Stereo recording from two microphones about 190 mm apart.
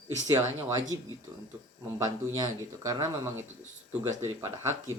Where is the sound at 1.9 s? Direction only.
20° right (ahead or behind).